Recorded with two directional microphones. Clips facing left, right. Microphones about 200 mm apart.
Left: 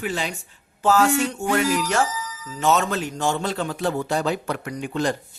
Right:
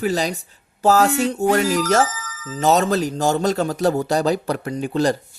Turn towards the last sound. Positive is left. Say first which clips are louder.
# right 5 dB
turn(degrees=-35)  # may be behind; listen again after turning